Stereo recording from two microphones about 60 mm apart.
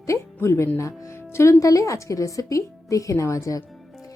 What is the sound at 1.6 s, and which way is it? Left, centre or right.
Speech, left.